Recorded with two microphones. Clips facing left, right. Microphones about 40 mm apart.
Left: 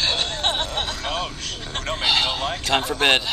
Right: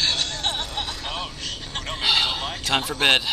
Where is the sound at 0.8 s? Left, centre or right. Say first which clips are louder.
Left 4 dB; left.